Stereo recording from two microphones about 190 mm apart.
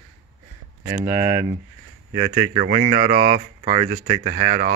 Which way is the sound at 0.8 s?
15° right (ahead or behind).